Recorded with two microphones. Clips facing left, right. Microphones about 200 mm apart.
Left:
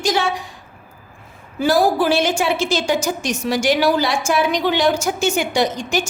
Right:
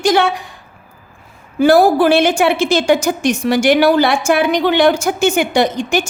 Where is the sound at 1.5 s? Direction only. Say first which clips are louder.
Right 6 dB; 60° right (ahead or behind).